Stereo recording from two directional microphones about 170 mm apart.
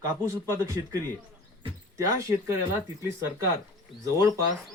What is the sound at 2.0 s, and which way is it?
Speech, 15° right (ahead or behind).